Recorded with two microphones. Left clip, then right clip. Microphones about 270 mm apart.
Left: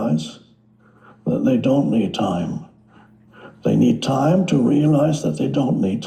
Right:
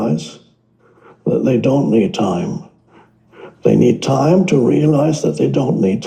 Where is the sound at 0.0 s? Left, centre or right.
Right.